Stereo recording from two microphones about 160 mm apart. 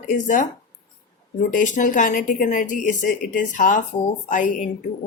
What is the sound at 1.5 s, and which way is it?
Speech, 55° left (ahead or behind).